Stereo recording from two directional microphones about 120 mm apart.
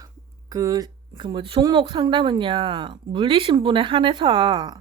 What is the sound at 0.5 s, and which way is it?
A woman's voice, 30° right (ahead or behind).